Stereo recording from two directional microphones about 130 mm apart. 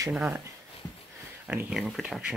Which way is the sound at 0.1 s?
10° right (ahead or behind).